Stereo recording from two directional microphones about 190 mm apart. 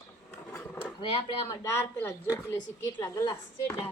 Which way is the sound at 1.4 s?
15° left (ahead or behind).